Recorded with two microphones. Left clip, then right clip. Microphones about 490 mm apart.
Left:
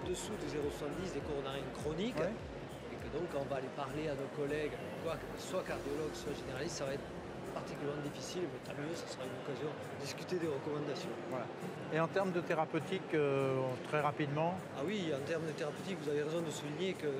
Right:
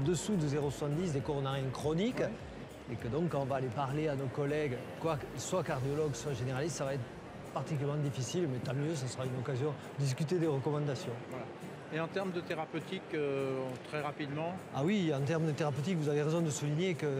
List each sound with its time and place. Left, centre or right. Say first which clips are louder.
0.1 s speech: right 7 dB; right
3.5 s speech: right 5 dB; right
8.3 s speech: right 5 dB; right
10.0 s speech: right 5 dB; right
11.9 s speech: left 2 dB; left
14.8 s speech: right 7 dB; right